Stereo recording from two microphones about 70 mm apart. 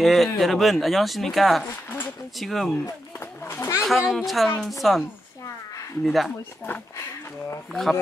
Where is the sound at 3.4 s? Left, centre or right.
Left.